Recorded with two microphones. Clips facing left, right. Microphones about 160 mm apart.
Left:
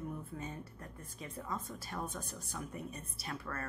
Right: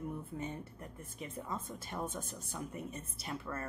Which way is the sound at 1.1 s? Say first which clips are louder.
Even; 20° right (ahead or behind).